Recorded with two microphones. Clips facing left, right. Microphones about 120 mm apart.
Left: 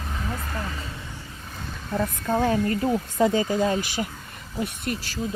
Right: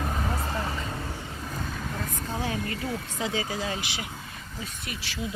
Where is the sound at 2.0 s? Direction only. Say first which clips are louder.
Left 10 dB; 50° left (ahead or behind).